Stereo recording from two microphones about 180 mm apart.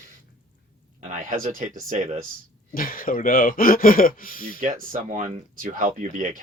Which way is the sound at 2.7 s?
50° left (ahead or behind).